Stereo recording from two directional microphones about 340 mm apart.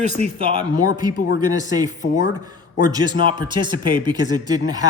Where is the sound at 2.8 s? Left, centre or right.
Centre.